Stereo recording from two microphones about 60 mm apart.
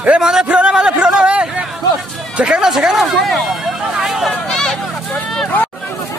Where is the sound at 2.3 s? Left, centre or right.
Centre.